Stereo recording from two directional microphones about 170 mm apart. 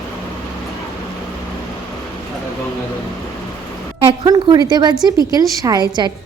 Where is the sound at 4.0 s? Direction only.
30° right (ahead or behind).